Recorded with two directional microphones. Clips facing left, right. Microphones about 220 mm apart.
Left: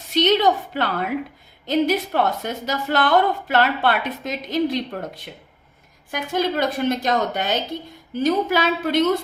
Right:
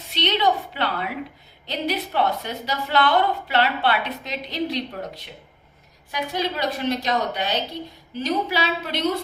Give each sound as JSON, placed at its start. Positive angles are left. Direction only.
{"t": 0.1, "sound": "a woman's voice", "side_deg": 45}